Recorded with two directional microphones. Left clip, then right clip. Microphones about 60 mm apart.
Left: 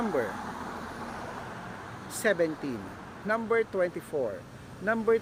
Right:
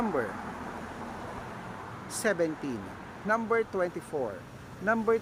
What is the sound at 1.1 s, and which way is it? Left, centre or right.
Vehicle, left.